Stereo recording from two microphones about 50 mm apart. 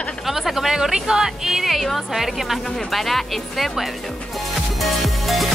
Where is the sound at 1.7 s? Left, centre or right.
Centre.